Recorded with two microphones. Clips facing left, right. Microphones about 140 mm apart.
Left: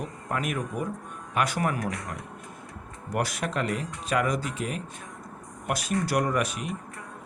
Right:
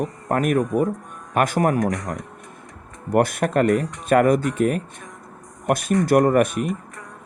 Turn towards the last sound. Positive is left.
turn(degrees=-50)  # may be behind; listen again after turning